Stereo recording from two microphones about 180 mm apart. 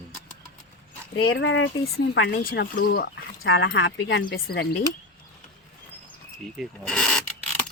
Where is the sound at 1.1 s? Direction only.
90° left.